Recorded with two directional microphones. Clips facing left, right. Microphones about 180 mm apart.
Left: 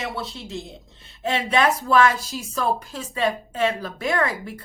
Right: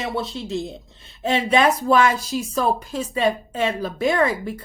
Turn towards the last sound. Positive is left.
turn(degrees=-20)  # may be behind; listen again after turning